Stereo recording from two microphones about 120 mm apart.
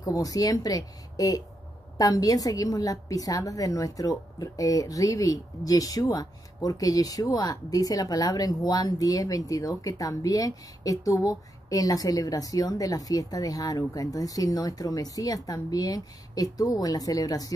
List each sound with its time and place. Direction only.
0.0 s a woman's voice: 30° left (ahead or behind)